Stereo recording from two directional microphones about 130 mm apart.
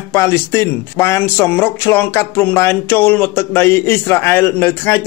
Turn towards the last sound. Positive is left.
turn(degrees=20)  # may be behind; listen again after turning